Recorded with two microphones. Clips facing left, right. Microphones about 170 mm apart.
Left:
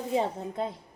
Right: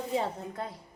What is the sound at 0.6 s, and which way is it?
Speech, 20° left (ahead or behind).